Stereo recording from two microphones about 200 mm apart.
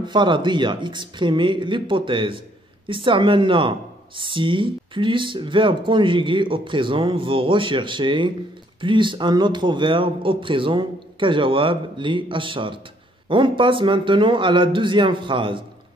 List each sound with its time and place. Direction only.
0.0 s speech: 20° right (ahead or behind)